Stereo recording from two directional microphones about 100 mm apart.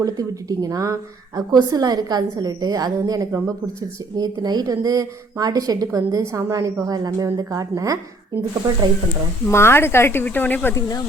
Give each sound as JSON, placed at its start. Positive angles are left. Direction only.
{"t": 0.0, "sound": "a woman's voice", "side_deg": -35}
{"t": 9.5, "sound": "speech", "side_deg": 25}
{"t": 10.8, "sound": "speech", "side_deg": 40}